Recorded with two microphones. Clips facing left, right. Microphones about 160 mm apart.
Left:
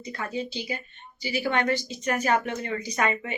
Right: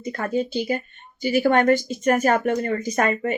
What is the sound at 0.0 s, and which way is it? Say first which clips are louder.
A woman's voice: right 7 dB; 50° right (ahead or behind).